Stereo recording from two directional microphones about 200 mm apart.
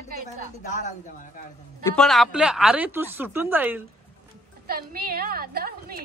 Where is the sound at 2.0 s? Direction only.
Centre (ahead or behind).